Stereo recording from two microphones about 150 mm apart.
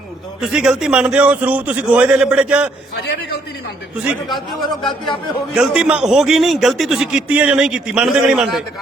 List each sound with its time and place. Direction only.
0.4 s a man's voice: 5° right (ahead or behind)
4.8 s speech: 30° left (ahead or behind)
5.5 s a man's voice: 5° right (ahead or behind)